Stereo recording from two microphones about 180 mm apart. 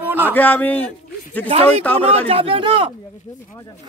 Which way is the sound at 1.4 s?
35° right (ahead or behind).